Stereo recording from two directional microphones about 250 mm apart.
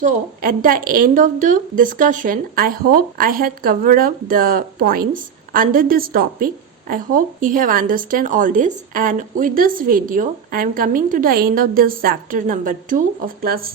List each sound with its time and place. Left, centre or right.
0.0 s a woman's voice: right